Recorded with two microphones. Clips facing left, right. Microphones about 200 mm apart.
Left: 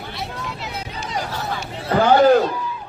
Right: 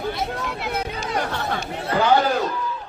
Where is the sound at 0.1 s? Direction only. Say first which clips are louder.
Right 4 dB; 50° right (ahead or behind).